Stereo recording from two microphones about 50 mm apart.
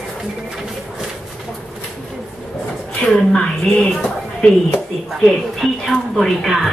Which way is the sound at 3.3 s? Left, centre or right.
Centre.